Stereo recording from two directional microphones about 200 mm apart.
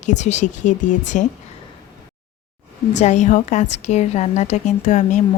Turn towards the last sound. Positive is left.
turn(degrees=35)  # may be behind; listen again after turning